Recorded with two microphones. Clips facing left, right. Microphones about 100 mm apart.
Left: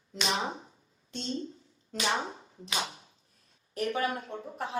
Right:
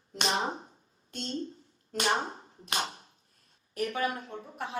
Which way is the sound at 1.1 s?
50° right (ahead or behind).